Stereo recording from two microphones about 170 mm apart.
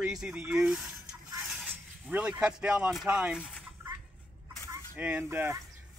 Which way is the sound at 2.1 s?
5° right (ahead or behind).